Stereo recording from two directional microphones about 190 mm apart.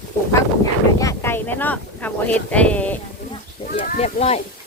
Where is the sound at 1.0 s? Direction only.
15° left (ahead or behind).